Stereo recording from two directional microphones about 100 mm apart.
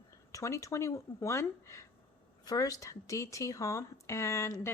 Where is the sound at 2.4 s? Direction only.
40° left (ahead or behind).